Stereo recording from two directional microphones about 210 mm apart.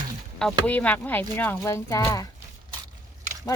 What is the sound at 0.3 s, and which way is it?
Speech, 5° left (ahead or behind).